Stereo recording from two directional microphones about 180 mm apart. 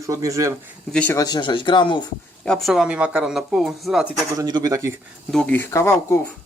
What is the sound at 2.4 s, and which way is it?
Speech, centre (ahead or behind).